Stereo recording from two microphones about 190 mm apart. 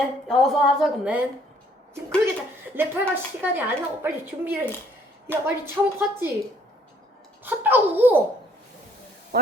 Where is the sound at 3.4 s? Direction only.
10° right (ahead or behind).